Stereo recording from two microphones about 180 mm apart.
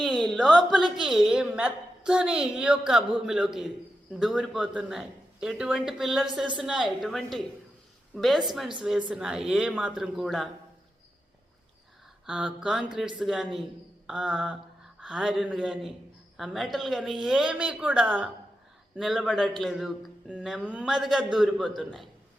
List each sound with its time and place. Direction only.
0.0 s a woman's voice: centre (ahead or behind)
12.2 s a woman's voice: 5° right (ahead or behind)